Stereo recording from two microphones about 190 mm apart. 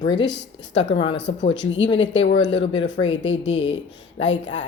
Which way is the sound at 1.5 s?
75° left (ahead or behind).